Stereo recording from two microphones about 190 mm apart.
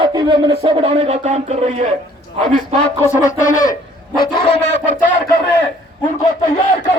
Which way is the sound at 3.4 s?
45° left (ahead or behind).